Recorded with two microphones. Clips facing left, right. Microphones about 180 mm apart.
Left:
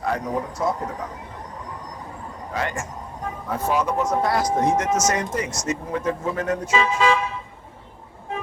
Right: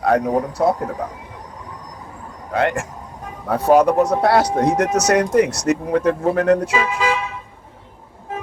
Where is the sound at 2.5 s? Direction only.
65° right (ahead or behind).